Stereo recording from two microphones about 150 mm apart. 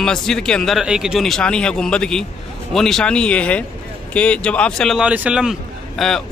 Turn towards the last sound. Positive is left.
turn(degrees=0)  # may be behind; listen again after turning